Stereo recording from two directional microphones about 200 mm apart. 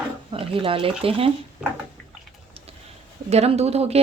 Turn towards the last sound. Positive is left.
turn(degrees=-30)  # may be behind; listen again after turning